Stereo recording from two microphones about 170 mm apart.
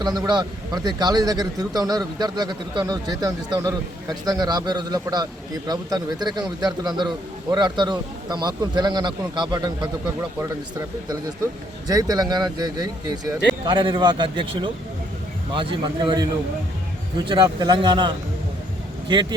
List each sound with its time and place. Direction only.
0.0 s a man's voice: 25° right (ahead or behind)